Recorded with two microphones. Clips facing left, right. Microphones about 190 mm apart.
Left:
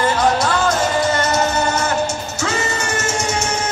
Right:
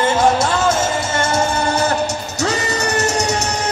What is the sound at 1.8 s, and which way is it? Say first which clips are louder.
Music: right 1 dB; 40° right (ahead or behind).